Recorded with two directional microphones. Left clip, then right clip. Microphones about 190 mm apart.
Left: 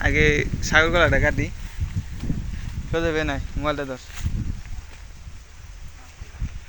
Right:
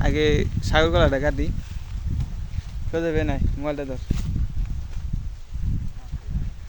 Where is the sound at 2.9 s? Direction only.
15° right (ahead or behind).